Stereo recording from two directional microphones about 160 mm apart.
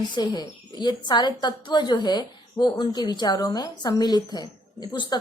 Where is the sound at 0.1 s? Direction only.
25° left (ahead or behind).